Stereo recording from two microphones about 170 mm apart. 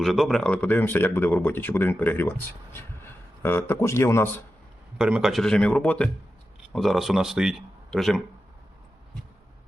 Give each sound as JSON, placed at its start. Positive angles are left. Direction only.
{"t": 0.0, "sound": "a man's voice", "side_deg": 0}
{"t": 4.9, "sound": "speech", "side_deg": -5}